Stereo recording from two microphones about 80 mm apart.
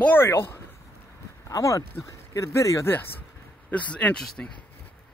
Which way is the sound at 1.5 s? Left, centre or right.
Left.